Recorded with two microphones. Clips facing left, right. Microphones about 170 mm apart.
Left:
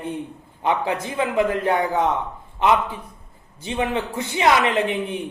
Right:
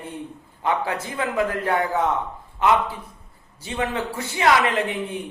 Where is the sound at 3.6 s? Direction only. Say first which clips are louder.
Left 2 dB; 20° left (ahead or behind).